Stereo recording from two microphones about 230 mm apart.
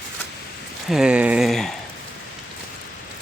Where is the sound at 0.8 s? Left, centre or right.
Centre.